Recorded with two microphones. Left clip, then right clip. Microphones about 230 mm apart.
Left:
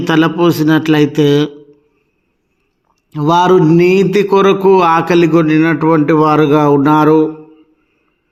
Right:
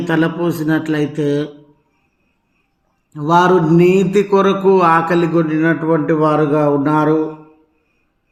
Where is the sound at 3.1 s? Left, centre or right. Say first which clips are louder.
Left 3 dB; left.